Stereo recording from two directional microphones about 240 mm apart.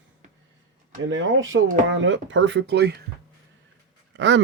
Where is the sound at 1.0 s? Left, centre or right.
Right.